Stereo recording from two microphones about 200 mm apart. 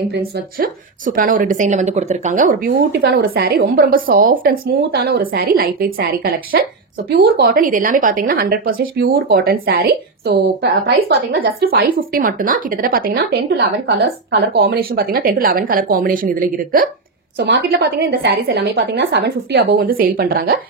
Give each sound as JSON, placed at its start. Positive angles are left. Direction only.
{"t": 0.1, "sound": "a woman's voice", "side_deg": -45}
{"t": 17.4, "sound": "a woman's voice", "side_deg": -60}